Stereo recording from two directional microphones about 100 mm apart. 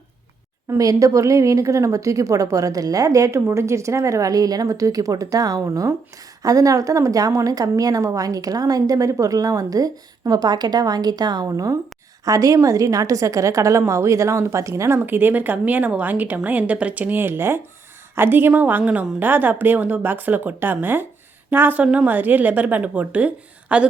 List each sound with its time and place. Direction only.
0.8 s a woman's voice: 35° right (ahead or behind); by 23.8 s 15° right (ahead or behind)